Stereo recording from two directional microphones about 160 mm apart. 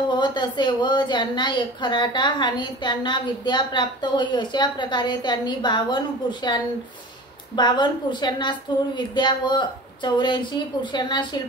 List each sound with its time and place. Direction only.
0.1 s a woman's voice: 30° left (ahead or behind)
7.5 s a woman's voice: 30° left (ahead or behind)